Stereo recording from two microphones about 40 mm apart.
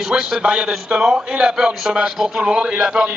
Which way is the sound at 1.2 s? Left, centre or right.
Centre.